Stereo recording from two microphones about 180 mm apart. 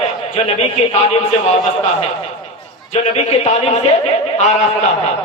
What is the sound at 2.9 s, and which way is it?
Speech, 35° left (ahead or behind).